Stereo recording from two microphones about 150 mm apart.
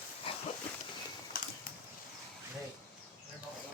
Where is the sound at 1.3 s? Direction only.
70° left (ahead or behind).